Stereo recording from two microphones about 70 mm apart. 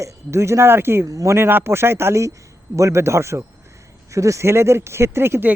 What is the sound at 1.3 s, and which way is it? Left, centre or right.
Speech, right.